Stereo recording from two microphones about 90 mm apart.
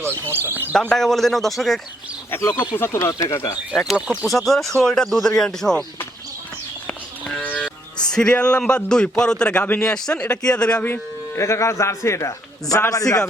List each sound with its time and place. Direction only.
0.0 s speech: 25° right (ahead or behind)
0.7 s speech: 5° left (ahead or behind)
2.3 s a man's voice: 25° left (ahead or behind); by 3.6 s 40° left (ahead or behind)
3.9 s speech: 15° right (ahead or behind)
4.3 s speech: centre (ahead or behind)
7.4 s speech: 15° left (ahead or behind)
10.8 s a man's voice: 25° left (ahead or behind)